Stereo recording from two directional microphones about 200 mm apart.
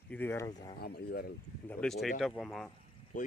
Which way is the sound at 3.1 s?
40° left (ahead or behind).